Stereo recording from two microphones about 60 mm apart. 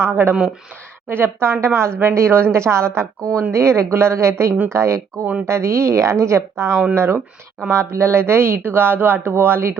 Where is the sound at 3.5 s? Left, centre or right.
Right.